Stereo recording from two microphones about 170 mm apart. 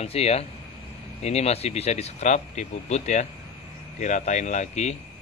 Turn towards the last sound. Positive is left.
turn(degrees=40)  # may be behind; listen again after turning